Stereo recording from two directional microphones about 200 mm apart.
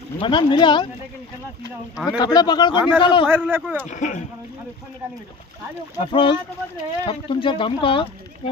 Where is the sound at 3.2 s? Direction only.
10° right (ahead or behind).